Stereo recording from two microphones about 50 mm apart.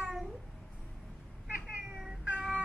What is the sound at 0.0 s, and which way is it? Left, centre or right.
Babbling, centre.